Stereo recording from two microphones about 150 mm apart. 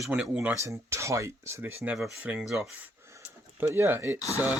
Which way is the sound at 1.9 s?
Centre (ahead or behind).